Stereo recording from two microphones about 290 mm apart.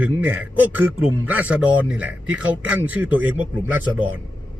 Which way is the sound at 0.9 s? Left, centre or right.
Right.